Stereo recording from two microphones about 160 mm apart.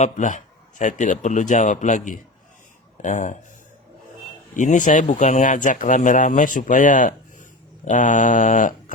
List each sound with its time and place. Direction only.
0.0 s speech: 50° left (ahead or behind)
4.5 s speech: 50° left (ahead or behind)